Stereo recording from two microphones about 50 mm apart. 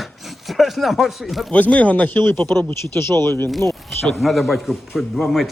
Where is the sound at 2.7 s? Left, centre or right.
Left.